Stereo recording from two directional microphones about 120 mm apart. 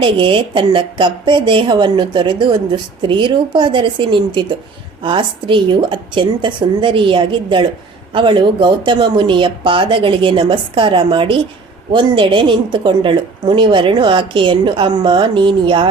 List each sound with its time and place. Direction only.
0.0 s a woman's voice: 45° right (ahead or behind)